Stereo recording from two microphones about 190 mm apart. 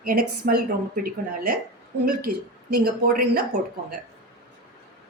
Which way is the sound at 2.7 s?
50° right (ahead or behind).